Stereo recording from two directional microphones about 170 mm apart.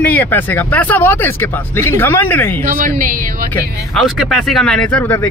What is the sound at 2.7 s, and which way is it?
Speech, 50° right (ahead or behind).